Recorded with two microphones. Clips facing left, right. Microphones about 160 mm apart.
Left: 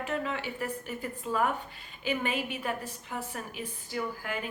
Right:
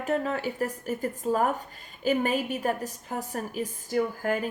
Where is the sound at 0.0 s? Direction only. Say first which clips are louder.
Right 5 dB; 40° right (ahead or behind).